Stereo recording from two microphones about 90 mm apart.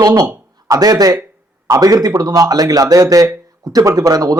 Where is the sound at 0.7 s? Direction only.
45° right (ahead or behind).